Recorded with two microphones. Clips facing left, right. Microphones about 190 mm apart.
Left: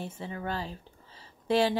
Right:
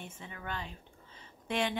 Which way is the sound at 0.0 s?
35° left (ahead or behind).